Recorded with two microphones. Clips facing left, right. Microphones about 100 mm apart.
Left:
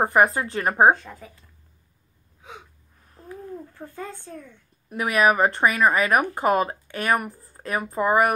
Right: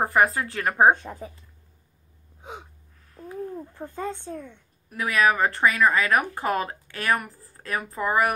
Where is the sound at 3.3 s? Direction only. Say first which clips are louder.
Right 3 dB; 20° right (ahead or behind).